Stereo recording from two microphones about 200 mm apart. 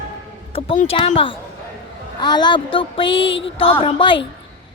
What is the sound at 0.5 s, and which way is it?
Speech, 30° left (ahead or behind).